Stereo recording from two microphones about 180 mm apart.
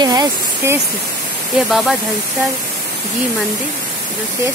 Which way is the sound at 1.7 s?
Centre (ahead or behind).